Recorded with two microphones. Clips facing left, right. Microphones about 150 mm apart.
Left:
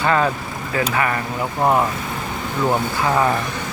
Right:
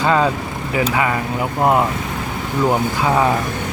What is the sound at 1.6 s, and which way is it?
Speech, 15° right (ahead or behind).